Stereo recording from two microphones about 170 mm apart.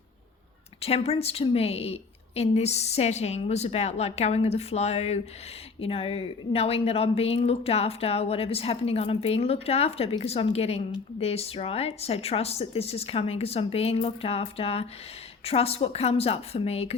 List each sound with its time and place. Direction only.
0.8 s speech: 35° left (ahead or behind)